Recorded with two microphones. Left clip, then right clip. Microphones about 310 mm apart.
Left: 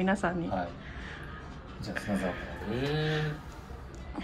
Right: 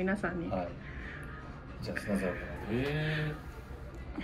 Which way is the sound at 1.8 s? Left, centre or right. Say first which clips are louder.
Left 1 dB; centre.